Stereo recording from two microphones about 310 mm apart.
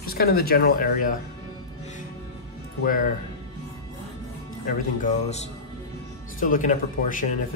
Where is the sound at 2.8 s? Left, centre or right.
Left.